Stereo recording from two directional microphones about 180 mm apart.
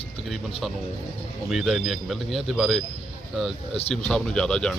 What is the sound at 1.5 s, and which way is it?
Speech, centre (ahead or behind).